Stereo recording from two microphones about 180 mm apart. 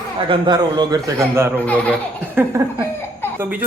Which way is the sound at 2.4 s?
10° right (ahead or behind).